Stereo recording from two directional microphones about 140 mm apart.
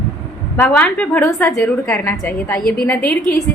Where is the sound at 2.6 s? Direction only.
90° left.